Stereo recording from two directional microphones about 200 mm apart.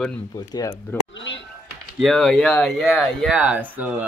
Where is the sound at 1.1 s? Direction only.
65° left (ahead or behind).